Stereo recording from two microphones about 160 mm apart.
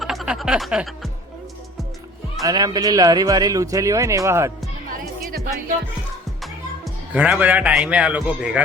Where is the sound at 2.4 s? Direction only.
25° right (ahead or behind).